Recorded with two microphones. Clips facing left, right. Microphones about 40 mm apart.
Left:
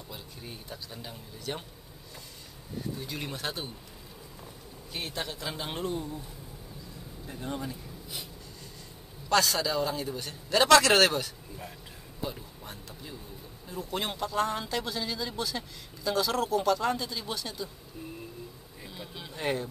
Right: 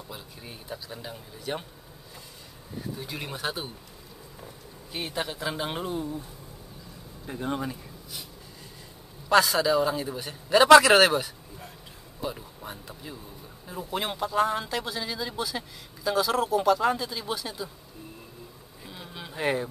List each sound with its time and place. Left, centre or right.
0.1 s speech: centre
3.0 s speech: centre
4.9 s speech: centre
7.2 s speech: right
9.3 s speech: centre
18.9 s a sound: centre